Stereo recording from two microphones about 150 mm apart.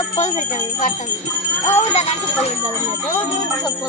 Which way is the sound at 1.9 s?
45° left (ahead or behind).